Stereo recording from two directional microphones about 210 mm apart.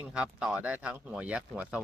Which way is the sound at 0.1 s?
5° right (ahead or behind).